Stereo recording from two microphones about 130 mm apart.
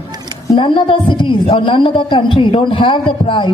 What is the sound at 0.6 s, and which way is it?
A woman's voice, 40° left (ahead or behind).